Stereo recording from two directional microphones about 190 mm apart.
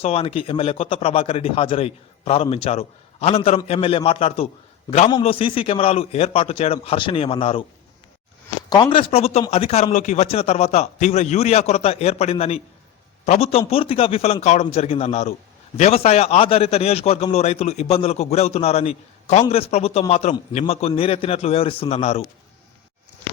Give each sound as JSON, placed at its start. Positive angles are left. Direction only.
{"t": 0.0, "sound": "a man's voice", "side_deg": 30}
{"t": 8.7, "sound": "a man's voice", "side_deg": 25}